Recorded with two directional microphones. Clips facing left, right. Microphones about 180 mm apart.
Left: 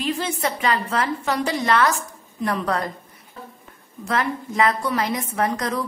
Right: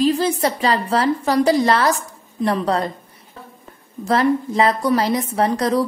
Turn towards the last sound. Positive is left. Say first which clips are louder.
# right 5 dB
turn(degrees=-30)  # may be behind; listen again after turning